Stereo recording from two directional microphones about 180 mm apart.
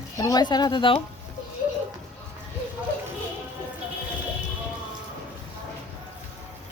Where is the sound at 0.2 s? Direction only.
20° left (ahead or behind).